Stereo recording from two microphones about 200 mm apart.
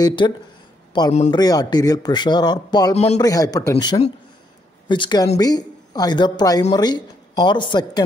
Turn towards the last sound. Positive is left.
turn(degrees=20)  # may be behind; listen again after turning